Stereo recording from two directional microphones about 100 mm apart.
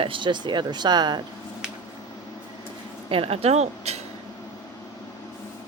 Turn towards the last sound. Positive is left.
turn(degrees=-90)